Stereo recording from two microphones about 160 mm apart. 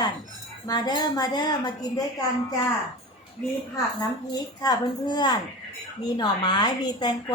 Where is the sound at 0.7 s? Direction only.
25° left (ahead or behind).